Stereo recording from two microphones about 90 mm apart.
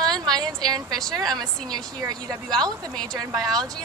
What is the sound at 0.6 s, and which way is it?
Speech, 50° right (ahead or behind).